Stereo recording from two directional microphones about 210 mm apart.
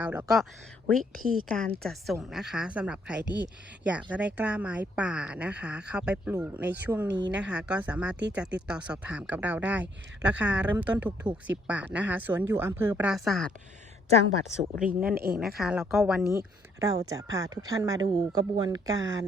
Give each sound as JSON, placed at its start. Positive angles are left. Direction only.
{"t": 0.0, "sound": "speech", "side_deg": -5}
{"t": 15.1, "sound": "speech", "side_deg": -45}
{"t": 15.4, "sound": "speech", "side_deg": 0}
{"t": 16.8, "sound": "speech", "side_deg": -15}